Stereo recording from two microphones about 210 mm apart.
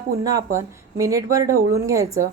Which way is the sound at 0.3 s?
15° right (ahead or behind).